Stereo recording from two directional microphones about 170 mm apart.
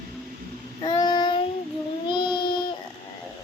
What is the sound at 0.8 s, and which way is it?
Child singing, 25° left (ahead or behind).